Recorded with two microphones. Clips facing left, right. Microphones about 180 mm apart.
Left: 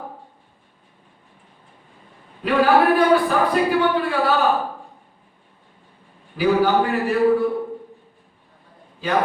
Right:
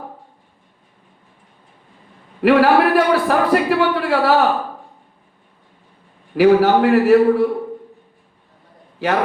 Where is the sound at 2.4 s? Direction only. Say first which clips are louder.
Right 4 dB; 80° right.